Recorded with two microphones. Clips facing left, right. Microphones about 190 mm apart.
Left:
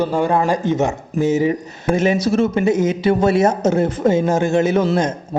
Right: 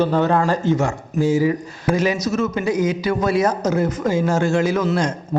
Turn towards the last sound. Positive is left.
turn(degrees=20)  # may be behind; listen again after turning